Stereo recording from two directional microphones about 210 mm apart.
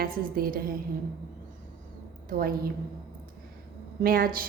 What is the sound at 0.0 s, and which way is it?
Speech, 45° right (ahead or behind).